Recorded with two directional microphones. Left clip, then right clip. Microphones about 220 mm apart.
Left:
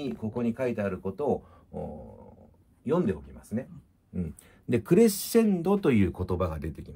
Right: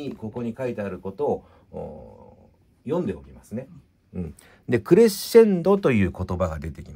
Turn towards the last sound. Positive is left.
turn(degrees=-30)  # may be behind; listen again after turning